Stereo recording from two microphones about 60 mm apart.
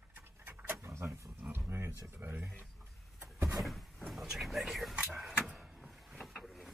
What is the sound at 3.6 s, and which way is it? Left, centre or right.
Vehicle, centre.